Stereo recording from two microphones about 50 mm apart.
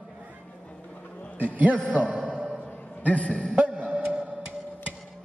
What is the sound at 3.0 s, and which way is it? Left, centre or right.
Speech, left.